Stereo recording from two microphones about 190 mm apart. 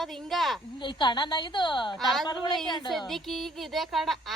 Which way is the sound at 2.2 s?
25° left (ahead or behind).